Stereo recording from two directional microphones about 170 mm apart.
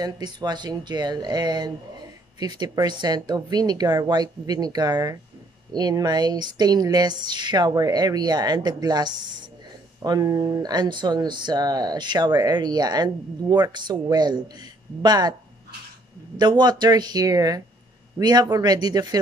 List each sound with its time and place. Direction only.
0.0 s speech: 25° right (ahead or behind)
16.3 s speech: 25° right (ahead or behind)